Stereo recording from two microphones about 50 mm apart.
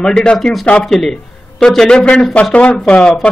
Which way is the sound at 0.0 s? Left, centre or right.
Centre.